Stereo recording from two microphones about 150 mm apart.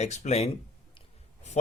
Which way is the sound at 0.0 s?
50° left (ahead or behind).